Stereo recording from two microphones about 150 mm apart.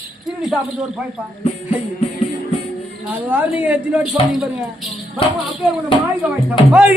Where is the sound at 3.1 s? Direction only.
10° right (ahead or behind).